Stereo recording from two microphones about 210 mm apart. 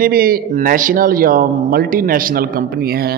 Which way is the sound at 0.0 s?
45° right (ahead or behind).